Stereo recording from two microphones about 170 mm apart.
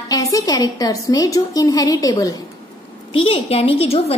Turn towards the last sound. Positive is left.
turn(degrees=35)  # may be behind; listen again after turning